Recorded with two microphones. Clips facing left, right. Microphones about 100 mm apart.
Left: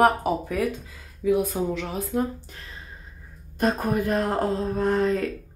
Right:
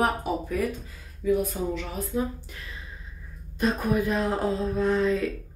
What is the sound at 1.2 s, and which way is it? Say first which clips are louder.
Speech: left 2 dB; 90° left.